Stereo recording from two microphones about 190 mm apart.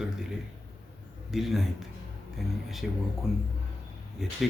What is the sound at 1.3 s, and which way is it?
A man's voice, centre (ahead or behind).